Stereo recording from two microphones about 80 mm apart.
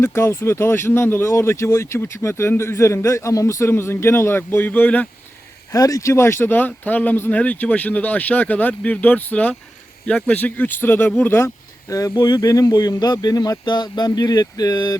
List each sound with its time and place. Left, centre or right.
0.0 s speech: left
5.7 s speech: left
12.1 s speech: left